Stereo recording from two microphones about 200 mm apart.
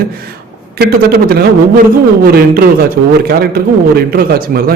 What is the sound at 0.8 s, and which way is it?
Speech, 50° right (ahead or behind).